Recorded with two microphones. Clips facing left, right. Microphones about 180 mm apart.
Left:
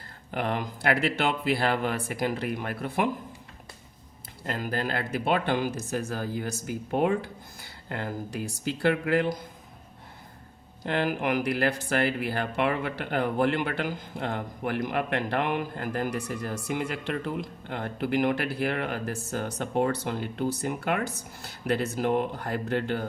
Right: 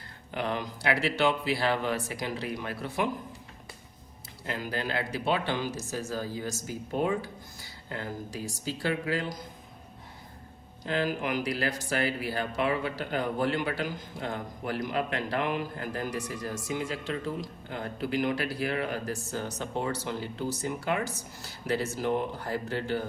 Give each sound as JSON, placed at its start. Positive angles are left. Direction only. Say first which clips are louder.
{"t": 0.3, "sound": "speech", "louder": "left 2 dB", "side_deg": 50}
{"t": 4.4, "sound": "speech", "louder": "left 3 dB", "side_deg": 50}
{"t": 10.8, "sound": "speech", "louder": "left 3 dB", "side_deg": 55}